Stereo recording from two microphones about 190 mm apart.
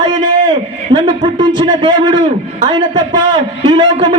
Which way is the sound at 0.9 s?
25° right (ahead or behind).